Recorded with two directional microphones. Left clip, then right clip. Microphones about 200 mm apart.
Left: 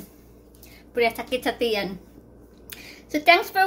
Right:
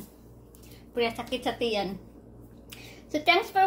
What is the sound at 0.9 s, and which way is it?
A woman's voice, 40° left (ahead or behind).